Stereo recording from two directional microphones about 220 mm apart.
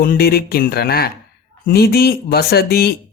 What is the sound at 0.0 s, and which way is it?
Speech, 45° left (ahead or behind).